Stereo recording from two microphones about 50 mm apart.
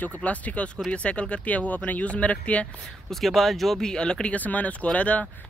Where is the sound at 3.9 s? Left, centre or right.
Centre.